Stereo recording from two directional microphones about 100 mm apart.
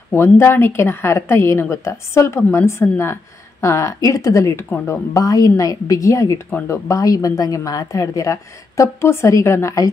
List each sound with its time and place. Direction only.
0.1 s a woman's voice: 25° left (ahead or behind)
4.6 s speech: 20° left (ahead or behind)
5.1 s a woman's voice: 35° left (ahead or behind)